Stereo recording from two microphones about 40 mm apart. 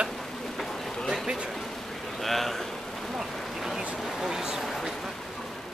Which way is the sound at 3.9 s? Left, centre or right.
Centre.